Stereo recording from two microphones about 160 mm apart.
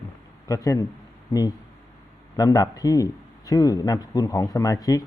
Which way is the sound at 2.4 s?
20° left (ahead or behind).